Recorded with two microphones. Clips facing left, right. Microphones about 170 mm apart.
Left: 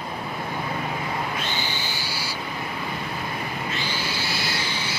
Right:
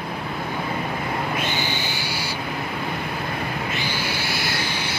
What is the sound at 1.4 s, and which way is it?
Owl, 15° right (ahead or behind).